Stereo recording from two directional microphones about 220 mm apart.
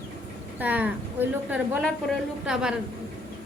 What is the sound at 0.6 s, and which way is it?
A woman's voice, 5° right (ahead or behind).